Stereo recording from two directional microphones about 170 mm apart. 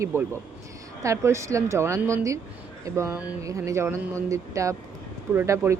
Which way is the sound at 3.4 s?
20° right (ahead or behind).